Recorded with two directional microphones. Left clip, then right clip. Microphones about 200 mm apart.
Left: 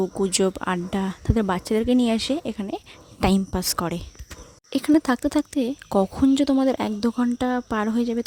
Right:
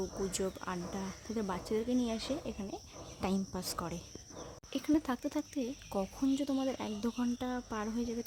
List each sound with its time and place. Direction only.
0.0 s speech: 40° left (ahead or behind)